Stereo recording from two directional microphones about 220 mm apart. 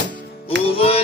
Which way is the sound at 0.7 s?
25° left (ahead or behind).